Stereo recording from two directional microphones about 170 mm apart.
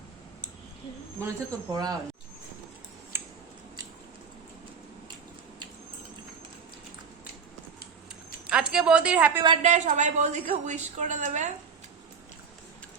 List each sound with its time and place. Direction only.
1.2 s speech: 20° right (ahead or behind)
3.1 s scissors: 15° right (ahead or behind)
8.4 s a sound: 5° right (ahead or behind)
9.6 s a woman's voice: 45° right (ahead or behind)